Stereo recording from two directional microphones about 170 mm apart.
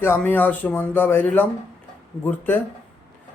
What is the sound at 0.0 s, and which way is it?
Speech, 15° left (ahead or behind).